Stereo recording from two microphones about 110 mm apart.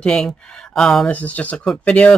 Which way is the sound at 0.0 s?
5° left (ahead or behind).